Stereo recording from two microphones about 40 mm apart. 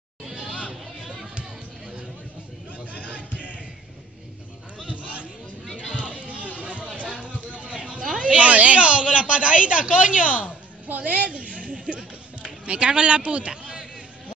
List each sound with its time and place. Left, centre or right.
0.2 s hubbub: centre
2.8 s chatter: right
3.1 s a sound: left
5.8 s music: left
6.1 s music: right
6.7 s chatter: right
7.3 s a sound: right
8.3 s speech: right
10.9 s a woman's voice: right
11.3 s a sound: right